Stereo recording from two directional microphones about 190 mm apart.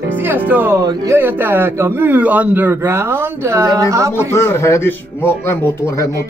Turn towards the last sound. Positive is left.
turn(degrees=10)  # may be behind; listen again after turning